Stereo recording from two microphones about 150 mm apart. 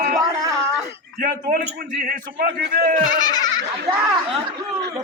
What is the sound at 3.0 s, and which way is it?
Speech, 30° left (ahead or behind).